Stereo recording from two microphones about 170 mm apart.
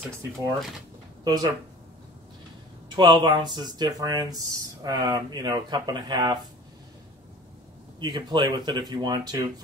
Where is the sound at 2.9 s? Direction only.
25° right (ahead or behind).